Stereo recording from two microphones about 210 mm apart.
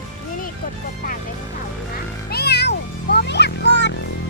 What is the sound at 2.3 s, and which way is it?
Music, 50° left (ahead or behind).